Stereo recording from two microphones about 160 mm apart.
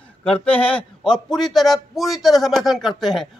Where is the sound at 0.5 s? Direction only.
10° left (ahead or behind).